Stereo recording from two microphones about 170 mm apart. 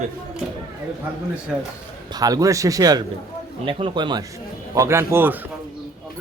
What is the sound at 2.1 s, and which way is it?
Speech, 20° right (ahead or behind).